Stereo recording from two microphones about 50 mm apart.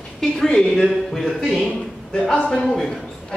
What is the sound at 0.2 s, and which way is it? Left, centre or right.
Speech, centre.